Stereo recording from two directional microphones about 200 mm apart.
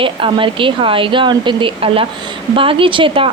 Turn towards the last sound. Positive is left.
turn(degrees=-25)  # may be behind; listen again after turning